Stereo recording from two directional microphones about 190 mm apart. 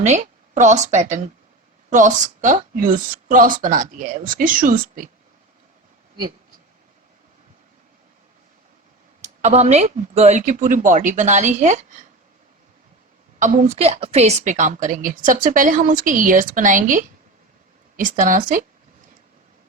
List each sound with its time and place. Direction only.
0.0 s a woman's voice: 40° right (ahead or behind)
9.2 s speech: 35° right (ahead or behind)
13.4 s a woman's voice: 40° right (ahead or behind)